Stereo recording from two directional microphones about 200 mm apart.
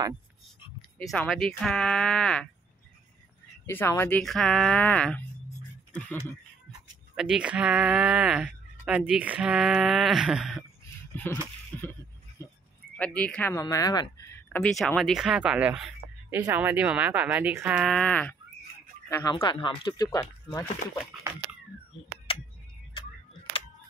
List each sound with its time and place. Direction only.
0.9 s speech: 5° left (ahead or behind)
3.6 s speech: 10° left (ahead or behind)
7.2 s speech: 5° right (ahead or behind)
11.1 s a sound: 10° left (ahead or behind)
12.9 s speech: 5° left (ahead or behind)
19.3 s speech: 25° left (ahead or behind)
22.3 s a sound: 25° left (ahead or behind)